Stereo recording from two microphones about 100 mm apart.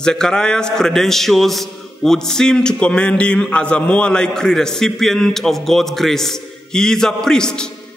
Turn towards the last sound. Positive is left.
turn(degrees=5)  # may be behind; listen again after turning